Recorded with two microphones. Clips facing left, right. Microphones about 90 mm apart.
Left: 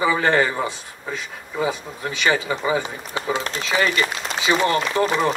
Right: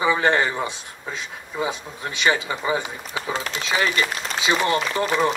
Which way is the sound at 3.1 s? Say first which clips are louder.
Left 3 dB; 40° left (ahead or behind).